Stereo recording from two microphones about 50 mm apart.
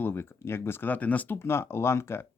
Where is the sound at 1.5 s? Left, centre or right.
Left.